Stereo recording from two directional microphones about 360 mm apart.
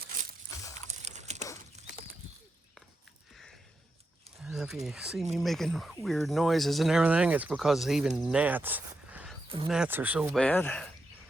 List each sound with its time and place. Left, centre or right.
1.0 s crumpling: centre
4.4 s speech: centre